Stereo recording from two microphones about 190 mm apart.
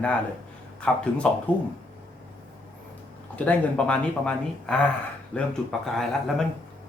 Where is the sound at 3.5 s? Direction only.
5° left (ahead or behind).